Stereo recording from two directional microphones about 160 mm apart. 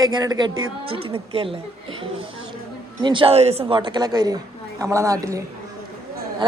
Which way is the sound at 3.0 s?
30° right (ahead or behind).